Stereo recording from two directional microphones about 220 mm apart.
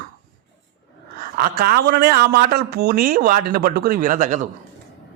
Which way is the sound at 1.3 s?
40° right (ahead or behind).